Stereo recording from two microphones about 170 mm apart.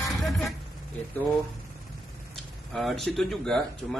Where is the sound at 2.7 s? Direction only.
Centre (ahead or behind).